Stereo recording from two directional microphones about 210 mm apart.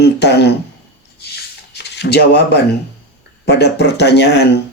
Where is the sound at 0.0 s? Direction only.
50° left (ahead or behind).